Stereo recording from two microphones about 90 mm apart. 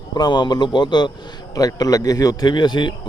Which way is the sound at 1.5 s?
40° left (ahead or behind).